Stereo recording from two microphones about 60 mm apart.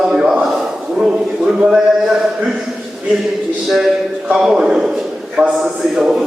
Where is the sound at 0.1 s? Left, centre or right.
Centre.